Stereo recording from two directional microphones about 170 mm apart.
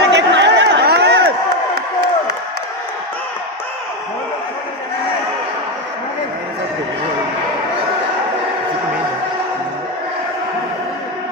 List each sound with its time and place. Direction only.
0.0 s crowd: 90° right